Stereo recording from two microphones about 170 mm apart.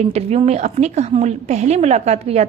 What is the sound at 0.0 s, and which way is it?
A woman's voice, 40° right (ahead or behind).